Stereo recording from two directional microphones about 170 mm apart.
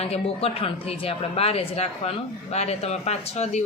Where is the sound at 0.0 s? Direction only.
35° left (ahead or behind).